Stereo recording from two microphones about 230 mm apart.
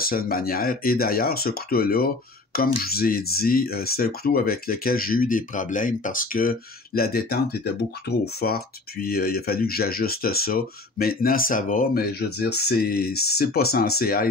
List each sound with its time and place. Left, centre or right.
0.0 s speech: left